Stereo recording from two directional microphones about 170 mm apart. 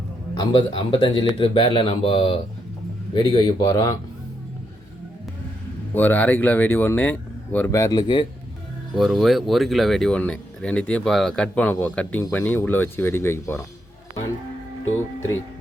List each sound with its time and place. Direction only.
0.3 s speech: 30° left (ahead or behind)
5.9 s speech: 10° left (ahead or behind); by 8.3 s 25° left (ahead or behind)
9.0 s speech: centre (ahead or behind); by 13.7 s 15° left (ahead or behind)
14.9 s music: 15° left (ahead or behind)